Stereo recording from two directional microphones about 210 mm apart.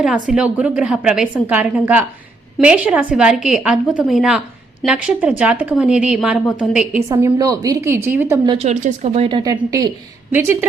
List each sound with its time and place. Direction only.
0.0 s a woman's voice: centre (ahead or behind)
7.1 s a woman's voice: 15° right (ahead or behind)
8.5 s a woman's voice: 35° right (ahead or behind); by 10.7 s 10° right (ahead or behind)